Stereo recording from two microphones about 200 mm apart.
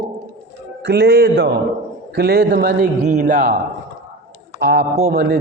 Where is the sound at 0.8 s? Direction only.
55° right (ahead or behind).